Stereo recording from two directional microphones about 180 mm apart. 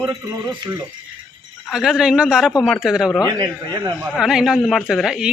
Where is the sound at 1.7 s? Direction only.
Centre (ahead or behind).